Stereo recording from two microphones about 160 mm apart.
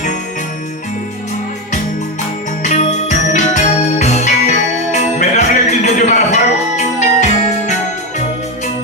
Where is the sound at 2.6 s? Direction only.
50° left (ahead or behind).